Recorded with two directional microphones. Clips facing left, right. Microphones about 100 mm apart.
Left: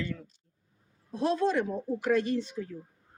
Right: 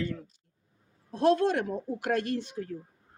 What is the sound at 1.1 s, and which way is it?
A man's voice, 65° right (ahead or behind).